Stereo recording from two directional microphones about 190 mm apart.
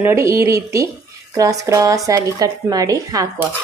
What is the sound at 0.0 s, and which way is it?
Speech, 15° right (ahead or behind).